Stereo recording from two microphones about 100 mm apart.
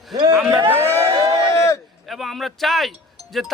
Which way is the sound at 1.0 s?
40° right (ahead or behind).